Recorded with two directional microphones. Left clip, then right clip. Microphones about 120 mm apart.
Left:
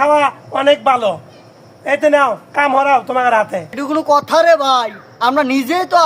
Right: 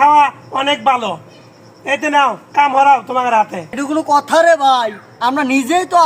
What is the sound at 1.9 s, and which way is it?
A man's voice, 25° left (ahead or behind).